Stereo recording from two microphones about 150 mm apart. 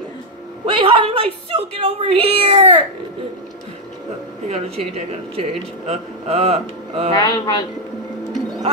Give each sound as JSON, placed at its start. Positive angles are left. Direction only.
{"t": 0.7, "sound": "speech", "side_deg": -35}
{"t": 4.5, "sound": "speech", "side_deg": -45}
{"t": 7.2, "sound": "speech", "side_deg": 25}